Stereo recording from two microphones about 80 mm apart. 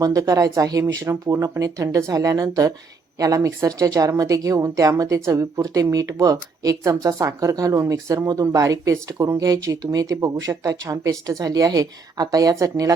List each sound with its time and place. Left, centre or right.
0.0 s a woman's voice: right